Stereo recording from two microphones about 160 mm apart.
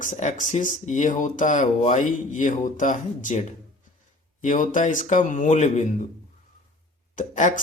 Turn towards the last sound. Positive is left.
turn(degrees=50)  # may be behind; listen again after turning